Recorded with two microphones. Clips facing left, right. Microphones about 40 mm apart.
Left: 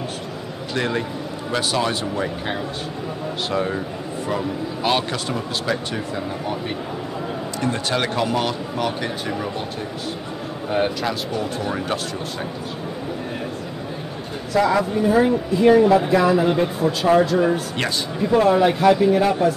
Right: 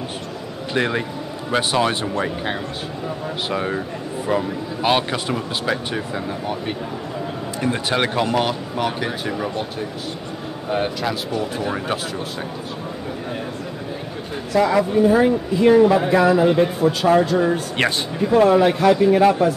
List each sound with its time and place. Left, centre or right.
0.7 s a man's voice: centre
2.1 s speech: centre
10.7 s speech: centre
14.5 s speech: centre
17.7 s speech: right
18.3 s speech: centre
19.1 s speech: centre